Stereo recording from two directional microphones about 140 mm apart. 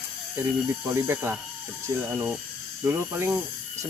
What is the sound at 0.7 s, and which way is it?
Speech, 15° right (ahead or behind).